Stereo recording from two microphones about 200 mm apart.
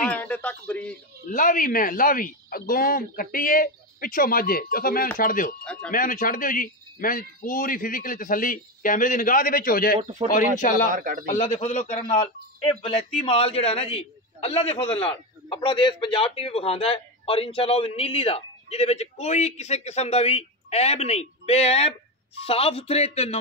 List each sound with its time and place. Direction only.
0.0 s a man's voice: 5° left (ahead or behind)
1.2 s speech: 45° left (ahead or behind)
9.9 s speech: 35° right (ahead or behind)
10.3 s speech: 40° left (ahead or behind)
10.9 s a man's voice: 45° right (ahead or behind)
11.2 s a man's voice: 40° left (ahead or behind)